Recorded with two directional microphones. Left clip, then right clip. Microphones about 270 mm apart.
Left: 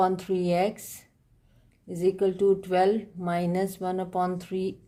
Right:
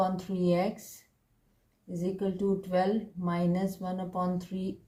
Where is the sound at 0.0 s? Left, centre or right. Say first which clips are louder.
Left 5 dB; left.